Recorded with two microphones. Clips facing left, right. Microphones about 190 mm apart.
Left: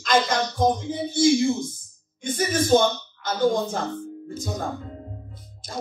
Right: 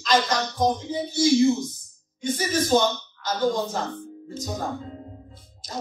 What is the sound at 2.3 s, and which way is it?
Speech, 55° left (ahead or behind).